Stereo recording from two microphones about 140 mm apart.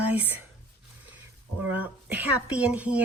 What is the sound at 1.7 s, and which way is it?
A woman's voice, 10° right (ahead or behind).